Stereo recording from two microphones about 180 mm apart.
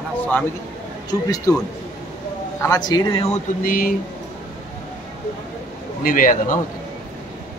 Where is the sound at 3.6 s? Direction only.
50° left (ahead or behind).